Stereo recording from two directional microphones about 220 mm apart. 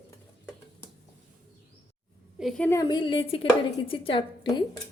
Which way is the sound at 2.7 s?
20° left (ahead or behind).